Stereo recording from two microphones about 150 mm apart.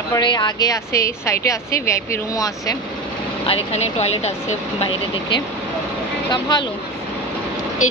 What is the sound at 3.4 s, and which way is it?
Speech, 45° left (ahead or behind).